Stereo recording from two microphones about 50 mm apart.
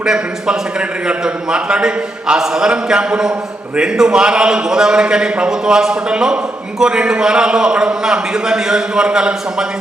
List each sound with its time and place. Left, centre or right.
0.0 s a man's voice: centre